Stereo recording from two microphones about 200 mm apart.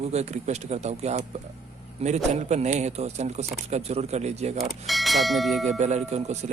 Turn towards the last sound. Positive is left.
turn(degrees=-35)  # may be behind; listen again after turning